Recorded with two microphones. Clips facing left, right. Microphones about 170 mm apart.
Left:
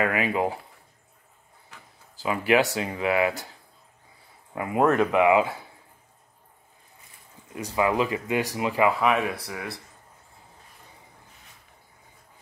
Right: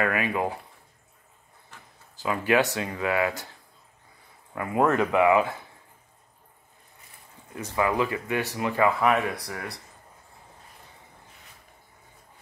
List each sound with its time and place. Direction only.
0.0 s speech: 20° left (ahead or behind)
2.2 s speech: 15° left (ahead or behind)
4.6 s speech: 20° left (ahead or behind)
7.5 s speech: 20° left (ahead or behind)
9.1 s speech: centre (ahead or behind)